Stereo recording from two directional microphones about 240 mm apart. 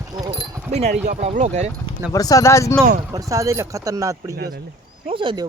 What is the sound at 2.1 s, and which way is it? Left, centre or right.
Speech, centre.